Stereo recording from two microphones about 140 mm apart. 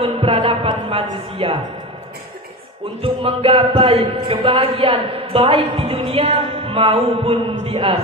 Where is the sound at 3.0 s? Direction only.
40° right (ahead or behind).